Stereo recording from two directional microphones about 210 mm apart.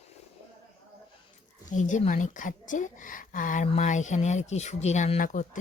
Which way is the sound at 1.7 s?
35° left (ahead or behind).